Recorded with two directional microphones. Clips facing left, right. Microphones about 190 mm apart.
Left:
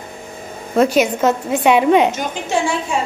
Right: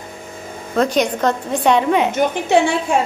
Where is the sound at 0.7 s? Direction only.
5° left (ahead or behind).